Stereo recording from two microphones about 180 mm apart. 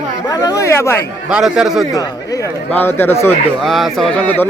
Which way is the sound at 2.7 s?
10° left (ahead or behind).